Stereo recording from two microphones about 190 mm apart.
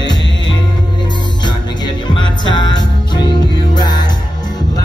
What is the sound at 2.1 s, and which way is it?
Music, 90° left.